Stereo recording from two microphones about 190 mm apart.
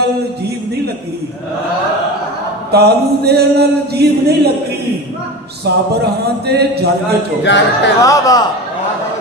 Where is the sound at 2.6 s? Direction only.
60° right (ahead or behind).